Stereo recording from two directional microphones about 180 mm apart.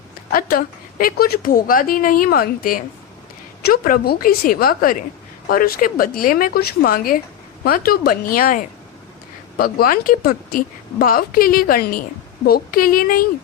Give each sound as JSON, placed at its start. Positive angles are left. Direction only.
{"t": 0.3, "sound": "a woman's voice", "side_deg": 50}